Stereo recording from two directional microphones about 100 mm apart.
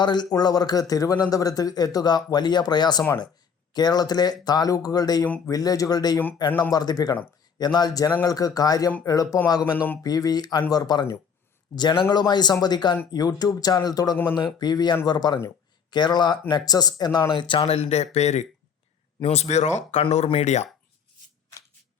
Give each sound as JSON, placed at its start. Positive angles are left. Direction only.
{"t": 0.0, "sound": "speech", "side_deg": 45}